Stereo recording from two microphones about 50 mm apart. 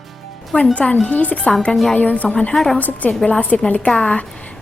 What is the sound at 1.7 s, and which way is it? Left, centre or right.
Speech, centre.